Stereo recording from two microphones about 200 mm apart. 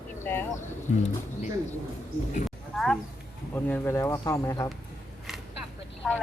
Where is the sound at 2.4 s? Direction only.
Centre (ahead or behind).